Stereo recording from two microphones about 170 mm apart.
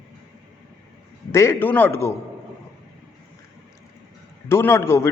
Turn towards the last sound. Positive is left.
turn(degrees=15)  # may be behind; listen again after turning